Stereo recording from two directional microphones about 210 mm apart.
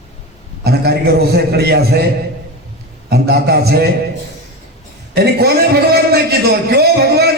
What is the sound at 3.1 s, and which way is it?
Speech, 50° right (ahead or behind).